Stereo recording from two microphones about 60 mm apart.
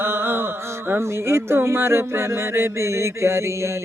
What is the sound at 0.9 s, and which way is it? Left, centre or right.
Music, right.